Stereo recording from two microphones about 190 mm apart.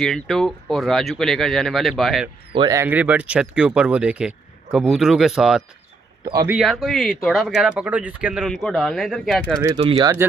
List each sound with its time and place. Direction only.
0.0 s speech: centre (ahead or behind)
2.5 s speech: 25° right (ahead or behind)
2.8 s speech: 10° right (ahead or behind)
9.8 s speech: 25° right (ahead or behind)